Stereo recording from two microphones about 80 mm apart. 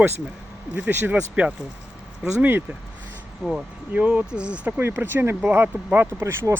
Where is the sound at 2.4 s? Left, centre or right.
Right.